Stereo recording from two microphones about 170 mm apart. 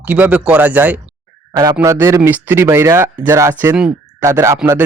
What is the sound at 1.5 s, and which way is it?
Speech, 20° right (ahead or behind).